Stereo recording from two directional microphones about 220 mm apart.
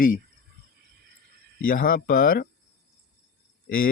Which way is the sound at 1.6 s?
40° left (ahead or behind).